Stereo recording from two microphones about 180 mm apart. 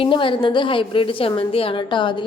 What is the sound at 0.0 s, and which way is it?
A woman's voice, 30° left (ahead or behind).